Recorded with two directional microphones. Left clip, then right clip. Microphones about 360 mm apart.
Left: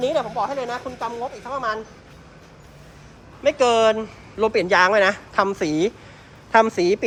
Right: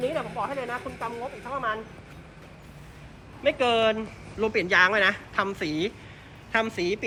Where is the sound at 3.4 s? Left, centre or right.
Centre.